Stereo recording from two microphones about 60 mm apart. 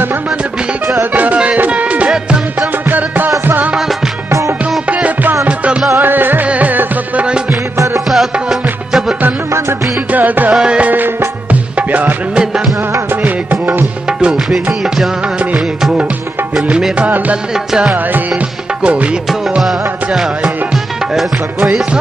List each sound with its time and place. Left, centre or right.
1.1 s music: right
5.7 s music: centre
5.9 s music: right
8.1 s music: centre
10.1 s music: right
10.5 s music: centre
11.9 s music: right
12.4 s music: centre
13.2 s music: right
15.5 s music: centre
18.8 s music: centre